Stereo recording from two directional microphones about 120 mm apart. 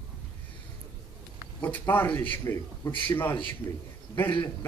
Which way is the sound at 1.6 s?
15° left (ahead or behind).